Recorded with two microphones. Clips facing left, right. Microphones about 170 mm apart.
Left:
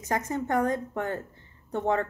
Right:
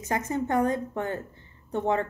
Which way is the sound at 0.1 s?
20° right (ahead or behind).